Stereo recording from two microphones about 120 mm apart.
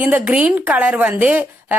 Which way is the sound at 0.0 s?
15° right (ahead or behind).